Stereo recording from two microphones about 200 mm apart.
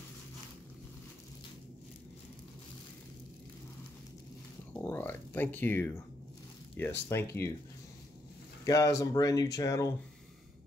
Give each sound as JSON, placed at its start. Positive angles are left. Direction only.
{"t": 4.7, "sound": "a sound", "side_deg": 10}
{"t": 6.8, "sound": "speech", "side_deg": 10}
{"t": 8.6, "sound": "speech", "side_deg": 15}